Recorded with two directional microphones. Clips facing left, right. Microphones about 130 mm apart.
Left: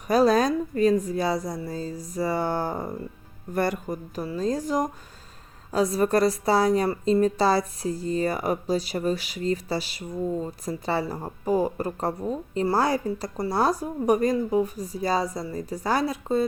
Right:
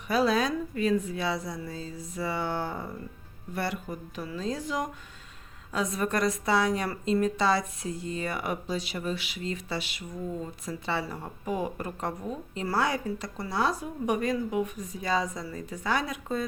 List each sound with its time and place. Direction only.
0.1 s speech: 40° left (ahead or behind)